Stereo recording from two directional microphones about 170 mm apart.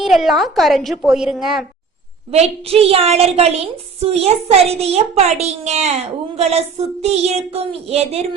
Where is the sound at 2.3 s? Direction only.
35° right (ahead or behind).